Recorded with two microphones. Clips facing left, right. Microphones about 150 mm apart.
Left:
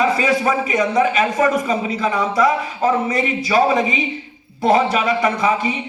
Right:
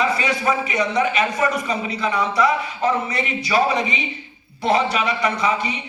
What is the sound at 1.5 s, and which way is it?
A man's voice, 45° left (ahead or behind).